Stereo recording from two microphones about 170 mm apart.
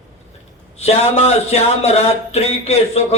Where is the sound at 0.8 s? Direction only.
40° left (ahead or behind).